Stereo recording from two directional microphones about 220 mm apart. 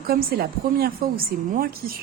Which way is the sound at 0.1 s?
45° right (ahead or behind).